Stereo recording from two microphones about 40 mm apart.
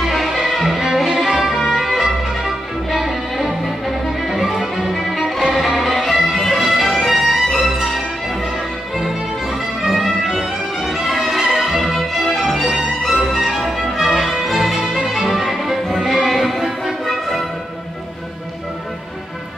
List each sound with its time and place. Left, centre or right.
0.0 s music: centre